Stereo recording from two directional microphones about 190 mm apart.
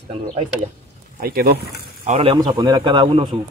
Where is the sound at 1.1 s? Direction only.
50° right (ahead or behind).